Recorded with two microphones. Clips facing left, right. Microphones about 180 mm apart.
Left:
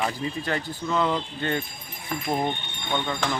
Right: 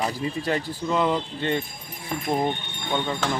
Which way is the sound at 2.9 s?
10° right (ahead or behind).